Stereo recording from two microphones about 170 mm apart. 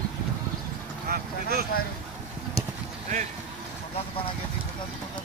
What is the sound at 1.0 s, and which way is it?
Speech, 65° right (ahead or behind).